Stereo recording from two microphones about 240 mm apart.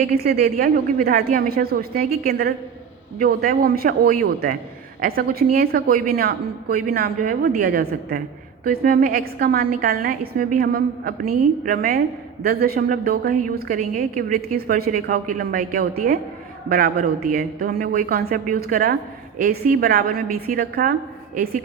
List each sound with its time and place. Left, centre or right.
0.1 s a woman's voice: right
3.2 s a woman's voice: right